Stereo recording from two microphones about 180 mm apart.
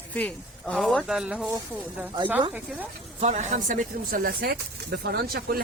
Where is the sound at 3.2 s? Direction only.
40° right (ahead or behind).